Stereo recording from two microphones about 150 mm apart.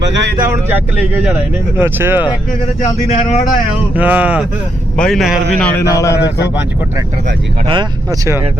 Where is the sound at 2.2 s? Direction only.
30° left (ahead or behind).